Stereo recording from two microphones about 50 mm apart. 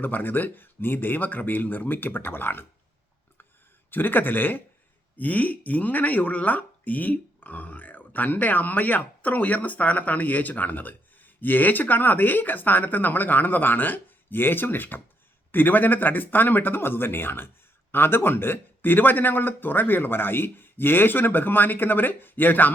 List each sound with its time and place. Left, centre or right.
0.0 s speech: left
3.9 s speech: left